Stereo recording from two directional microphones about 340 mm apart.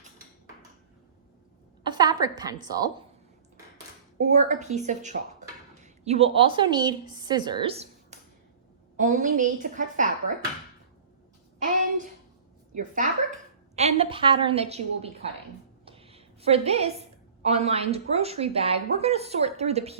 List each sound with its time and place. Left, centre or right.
1.8 s a sound: centre
2.2 s speech: centre
4.2 s a woman's voice: centre
12.7 s a woman's voice: right
15.9 s a sound: centre
17.4 s speech: centre